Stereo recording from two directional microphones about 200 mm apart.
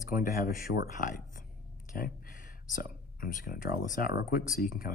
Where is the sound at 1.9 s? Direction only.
45° left (ahead or behind).